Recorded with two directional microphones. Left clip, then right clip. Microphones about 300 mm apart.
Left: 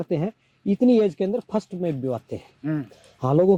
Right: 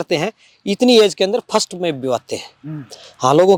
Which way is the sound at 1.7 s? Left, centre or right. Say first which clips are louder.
Right 7 dB; right.